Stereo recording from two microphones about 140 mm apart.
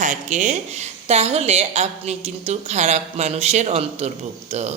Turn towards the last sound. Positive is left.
turn(degrees=-50)  # may be behind; listen again after turning